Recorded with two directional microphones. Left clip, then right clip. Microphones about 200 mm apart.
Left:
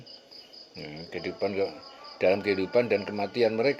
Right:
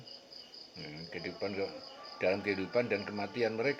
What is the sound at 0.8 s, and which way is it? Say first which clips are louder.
A man's voice: left 6 dB; 40° left (ahead or behind).